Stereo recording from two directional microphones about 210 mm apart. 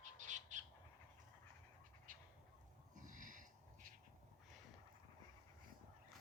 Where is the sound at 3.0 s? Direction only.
40° right (ahead or behind).